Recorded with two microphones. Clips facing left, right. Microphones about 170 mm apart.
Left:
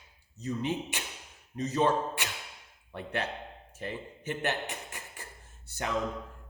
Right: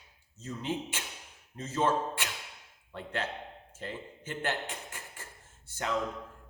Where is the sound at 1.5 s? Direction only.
15° left (ahead or behind).